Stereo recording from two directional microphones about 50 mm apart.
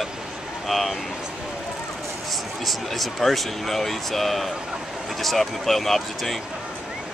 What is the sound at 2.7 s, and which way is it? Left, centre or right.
Speech, centre.